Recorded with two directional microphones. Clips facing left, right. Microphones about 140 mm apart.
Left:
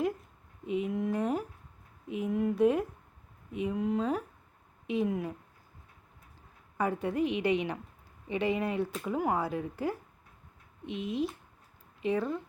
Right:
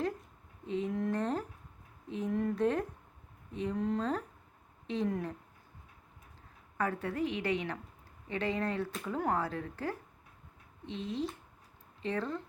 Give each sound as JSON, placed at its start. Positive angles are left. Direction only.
{"t": 0.7, "sound": "a sound", "side_deg": 10}
{"t": 3.5, "sound": "speech", "side_deg": 10}
{"t": 6.7, "sound": "speech", "side_deg": 15}